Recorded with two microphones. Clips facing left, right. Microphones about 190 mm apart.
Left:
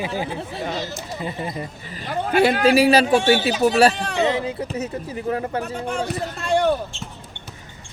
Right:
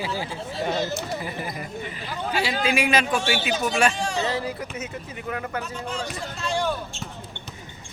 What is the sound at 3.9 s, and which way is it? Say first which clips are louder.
Speech: even; 60° left (ahead or behind).